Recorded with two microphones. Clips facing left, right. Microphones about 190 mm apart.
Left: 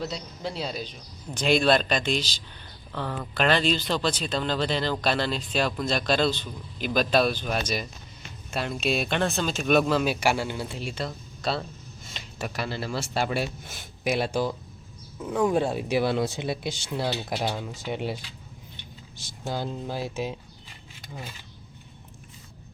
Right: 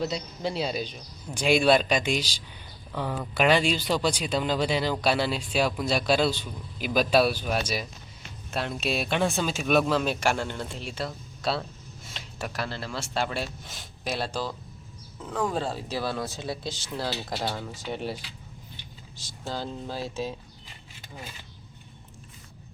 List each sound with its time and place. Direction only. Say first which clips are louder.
0.0 s speech: right 3 dB; centre (ahead or behind); by 18.2 s 15° left (ahead or behind)
19.5 s speech: left 2 dB; 15° left (ahead or behind)